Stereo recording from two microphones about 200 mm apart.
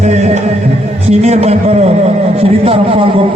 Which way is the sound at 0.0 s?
35° right (ahead or behind).